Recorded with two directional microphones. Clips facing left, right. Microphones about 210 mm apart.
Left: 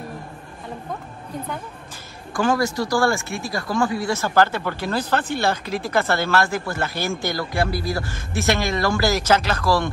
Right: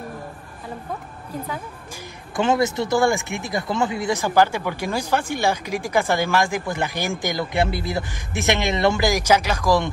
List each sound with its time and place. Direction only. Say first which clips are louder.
2.3 s speech: right 1 dB; 20° right (ahead or behind)